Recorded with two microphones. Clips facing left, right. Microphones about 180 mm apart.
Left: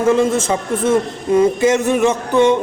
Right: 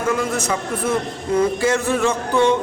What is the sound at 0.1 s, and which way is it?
A man's voice, 25° left (ahead or behind).